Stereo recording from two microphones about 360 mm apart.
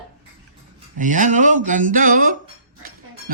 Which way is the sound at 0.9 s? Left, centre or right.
Right.